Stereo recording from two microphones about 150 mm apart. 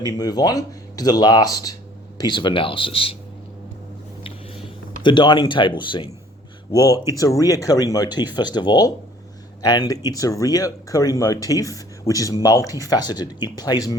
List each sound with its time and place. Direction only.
0.0 s speech: 25° left (ahead or behind)
4.2 s a sound: 35° left (ahead or behind)
6.7 s speech: 25° left (ahead or behind)